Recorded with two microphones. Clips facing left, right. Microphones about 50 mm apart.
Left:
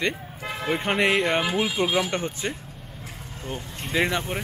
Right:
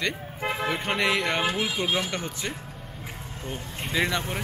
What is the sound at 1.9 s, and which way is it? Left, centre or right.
Speech, left.